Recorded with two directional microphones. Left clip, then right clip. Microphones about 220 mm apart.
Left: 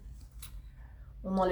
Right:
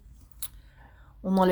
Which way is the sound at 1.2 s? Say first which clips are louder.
Right 6 dB; 45° right (ahead or behind).